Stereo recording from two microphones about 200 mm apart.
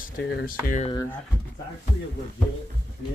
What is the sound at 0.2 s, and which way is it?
Speech, 60° left (ahead or behind).